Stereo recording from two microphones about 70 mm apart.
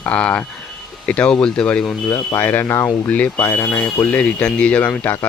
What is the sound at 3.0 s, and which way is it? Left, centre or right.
Speech, left.